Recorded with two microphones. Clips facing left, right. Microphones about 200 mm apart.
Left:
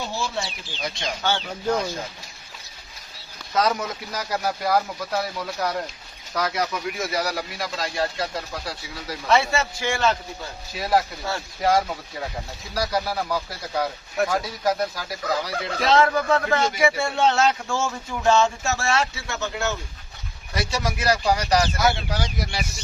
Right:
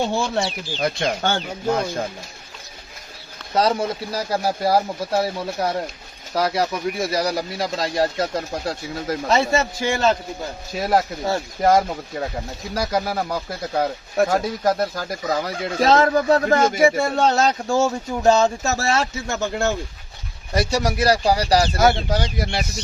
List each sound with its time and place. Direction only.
0.0 s speech: 60° right (ahead or behind)
0.4 s speech: centre (ahead or behind)
0.8 s speech: 55° right (ahead or behind)
3.5 s speech: 30° right (ahead or behind)
11.3 s speech: 40° right (ahead or behind)
12.9 s speech: 50° right (ahead or behind)
21.8 s speech: 50° right (ahead or behind)